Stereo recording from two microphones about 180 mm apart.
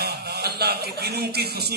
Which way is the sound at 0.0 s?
65° right (ahead or behind).